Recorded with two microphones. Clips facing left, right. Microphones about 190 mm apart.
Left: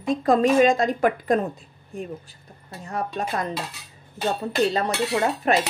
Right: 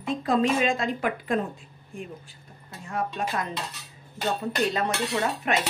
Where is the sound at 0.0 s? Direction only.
45° left (ahead or behind).